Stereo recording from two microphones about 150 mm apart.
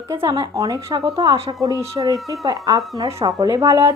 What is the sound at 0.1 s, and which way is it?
A woman's voice, 20° right (ahead or behind).